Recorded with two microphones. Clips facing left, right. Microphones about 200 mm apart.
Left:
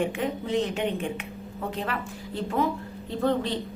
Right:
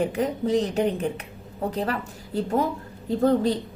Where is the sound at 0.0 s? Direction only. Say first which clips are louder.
Right 4 dB; 40° right (ahead or behind).